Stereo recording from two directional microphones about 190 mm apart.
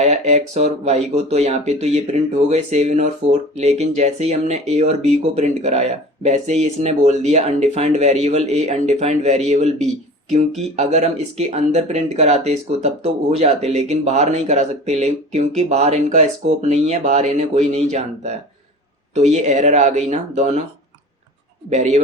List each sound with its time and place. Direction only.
0.0 s speech: 35° right (ahead or behind)
10.8 s speech: 35° right (ahead or behind)
21.7 s speech: 40° right (ahead or behind)